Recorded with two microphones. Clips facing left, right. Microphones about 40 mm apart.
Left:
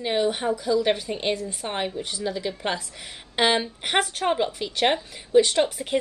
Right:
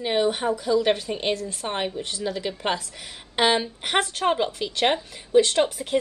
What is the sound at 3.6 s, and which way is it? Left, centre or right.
Speech, centre.